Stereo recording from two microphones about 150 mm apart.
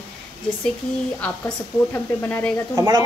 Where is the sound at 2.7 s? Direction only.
25° right (ahead or behind).